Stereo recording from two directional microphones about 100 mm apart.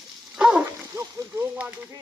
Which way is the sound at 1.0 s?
30° right (ahead or behind).